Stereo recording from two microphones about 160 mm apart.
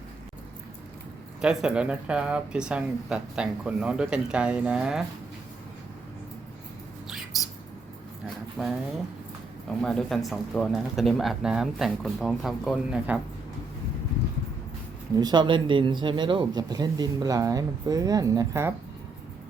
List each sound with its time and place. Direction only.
1.4 s speech: 5° right (ahead or behind)
8.6 s speech: 5° left (ahead or behind)
9.8 s speech: 5° left (ahead or behind)
15.1 s speech: 25° right (ahead or behind)